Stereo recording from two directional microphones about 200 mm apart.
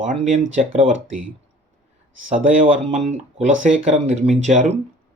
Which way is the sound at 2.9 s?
35° right (ahead or behind).